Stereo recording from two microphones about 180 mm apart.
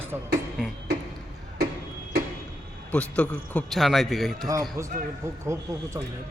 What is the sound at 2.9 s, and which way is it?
A man's voice, 5° left (ahead or behind).